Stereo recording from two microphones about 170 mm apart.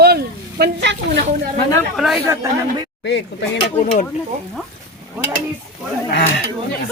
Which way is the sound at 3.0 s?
90° left.